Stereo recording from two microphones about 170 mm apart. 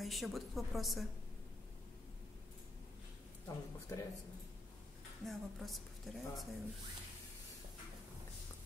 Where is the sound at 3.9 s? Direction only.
20° left (ahead or behind).